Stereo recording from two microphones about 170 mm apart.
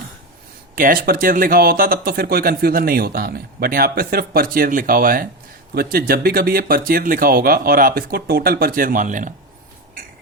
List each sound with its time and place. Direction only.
0.8 s speech: 55° right (ahead or behind)